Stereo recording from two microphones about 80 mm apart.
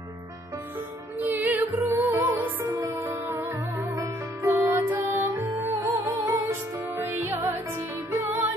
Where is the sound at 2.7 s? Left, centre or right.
Right.